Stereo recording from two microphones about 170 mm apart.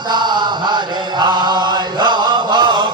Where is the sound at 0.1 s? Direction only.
25° right (ahead or behind).